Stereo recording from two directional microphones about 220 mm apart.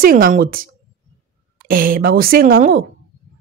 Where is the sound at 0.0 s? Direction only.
40° right (ahead or behind).